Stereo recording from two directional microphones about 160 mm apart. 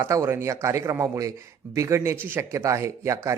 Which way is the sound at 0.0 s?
20° right (ahead or behind).